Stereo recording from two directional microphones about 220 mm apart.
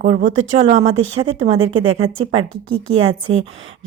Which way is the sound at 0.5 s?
20° right (ahead or behind).